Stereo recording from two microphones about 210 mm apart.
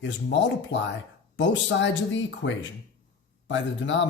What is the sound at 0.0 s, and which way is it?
Speech, 60° left (ahead or behind).